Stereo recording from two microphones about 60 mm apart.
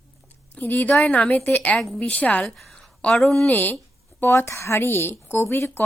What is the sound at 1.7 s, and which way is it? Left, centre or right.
Speech, centre.